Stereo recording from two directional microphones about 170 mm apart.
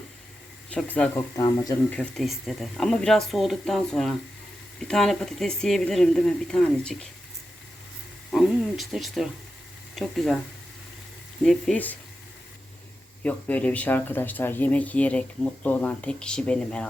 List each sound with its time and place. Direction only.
0.7 s speech: 5° left (ahead or behind)
1.4 s speech: 20° left (ahead or behind)
1.9 s speech: 5° left (ahead or behind)
8.3 s speech: centre (ahead or behind)
11.4 s speech: 5° left (ahead or behind)
13.2 s speech: 10° left (ahead or behind)